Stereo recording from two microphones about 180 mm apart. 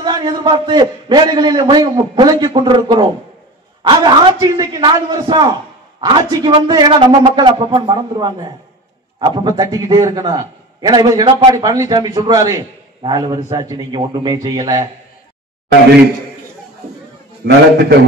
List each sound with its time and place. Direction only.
0.0 s a man's voice: 25° right (ahead or behind)